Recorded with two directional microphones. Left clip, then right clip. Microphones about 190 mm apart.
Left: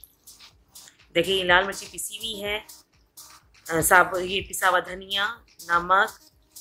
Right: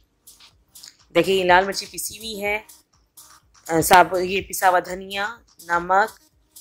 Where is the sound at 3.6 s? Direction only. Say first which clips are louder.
Right 4 dB; 30° right (ahead or behind).